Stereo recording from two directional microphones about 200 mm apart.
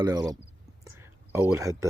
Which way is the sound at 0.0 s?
20° right (ahead or behind).